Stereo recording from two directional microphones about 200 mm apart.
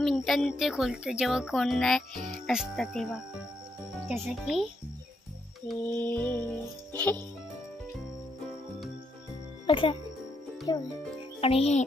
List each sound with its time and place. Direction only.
0.0 s a child's voice: centre (ahead or behind)
5.7 s music: 10° left (ahead or behind)
9.7 s speech: 25° left (ahead or behind)
11.4 s music: 30° left (ahead or behind)